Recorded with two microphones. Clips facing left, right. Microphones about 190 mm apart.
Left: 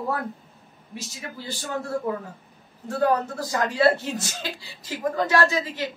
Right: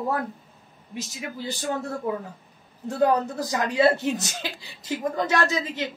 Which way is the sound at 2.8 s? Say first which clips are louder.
Right 1 dB; 15° right (ahead or behind).